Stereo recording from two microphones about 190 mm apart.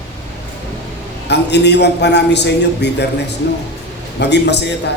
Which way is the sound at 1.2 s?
65° left (ahead or behind).